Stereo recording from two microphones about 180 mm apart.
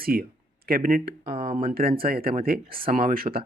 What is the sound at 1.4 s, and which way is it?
Speech, 30° right (ahead or behind).